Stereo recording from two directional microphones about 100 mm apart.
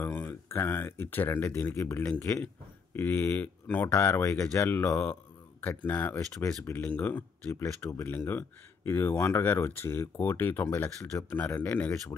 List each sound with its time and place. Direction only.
0.0 s speech: 20° left (ahead or behind)
4.6 s speech: 20° left (ahead or behind)
5.0 s a sound: 20° left (ahead or behind)
5.9 s speech: 20° left (ahead or behind)
7.5 s speech: 30° left (ahead or behind)